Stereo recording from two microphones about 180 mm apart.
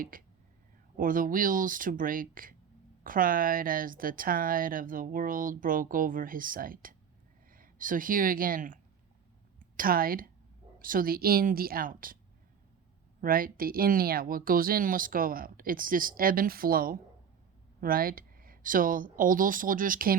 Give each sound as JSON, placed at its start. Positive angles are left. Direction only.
{"t": 0.0, "sound": "a woman's voice", "side_deg": -50}
{"t": 13.2, "sound": "a woman's voice", "side_deg": -50}